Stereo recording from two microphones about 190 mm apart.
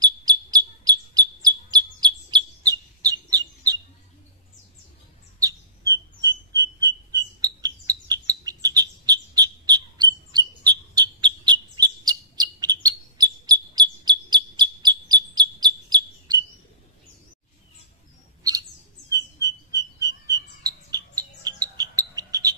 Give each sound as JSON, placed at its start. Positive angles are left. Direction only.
{"t": 0.0, "sound": "bird", "side_deg": -20}
{"t": 5.4, "sound": "bird", "side_deg": -20}
{"t": 6.5, "sound": "frog", "side_deg": -20}
{"t": 19.0, "sound": "bird", "side_deg": -20}